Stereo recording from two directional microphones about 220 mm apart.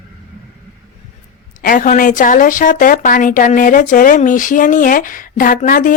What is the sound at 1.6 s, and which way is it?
Speech, 35° left (ahead or behind).